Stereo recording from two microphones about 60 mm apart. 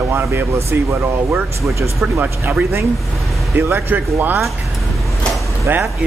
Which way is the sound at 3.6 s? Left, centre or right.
Right.